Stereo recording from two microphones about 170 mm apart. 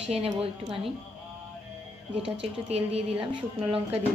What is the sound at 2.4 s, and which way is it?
Speech, 35° right (ahead or behind).